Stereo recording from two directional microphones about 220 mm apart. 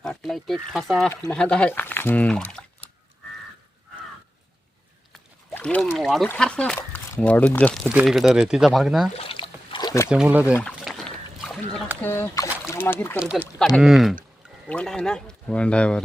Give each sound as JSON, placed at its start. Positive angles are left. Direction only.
{"t": 0.0, "sound": "speech", "side_deg": 0}
{"t": 5.1, "sound": "speech", "side_deg": 5}
{"t": 9.1, "sound": "a sound", "side_deg": 25}
{"t": 10.1, "sound": "speech", "side_deg": -5}
{"t": 10.5, "sound": "rowboat", "side_deg": 5}
{"t": 12.0, "sound": "speech", "side_deg": 10}
{"t": 13.1, "sound": "speech", "side_deg": -5}